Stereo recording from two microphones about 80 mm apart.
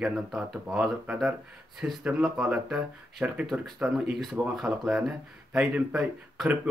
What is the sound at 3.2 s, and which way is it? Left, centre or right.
Speech, centre.